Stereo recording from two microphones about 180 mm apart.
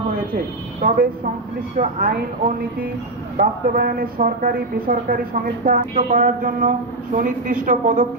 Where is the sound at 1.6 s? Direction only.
50° right (ahead or behind).